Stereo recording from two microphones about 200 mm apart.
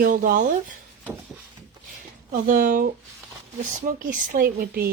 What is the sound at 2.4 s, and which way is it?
Speech, 40° right (ahead or behind).